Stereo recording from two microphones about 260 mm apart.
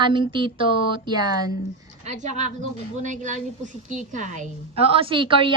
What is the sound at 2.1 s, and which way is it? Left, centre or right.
A woman's voice, right.